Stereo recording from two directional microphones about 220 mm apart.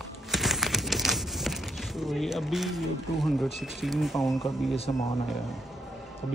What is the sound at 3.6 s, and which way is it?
Speech, centre (ahead or behind).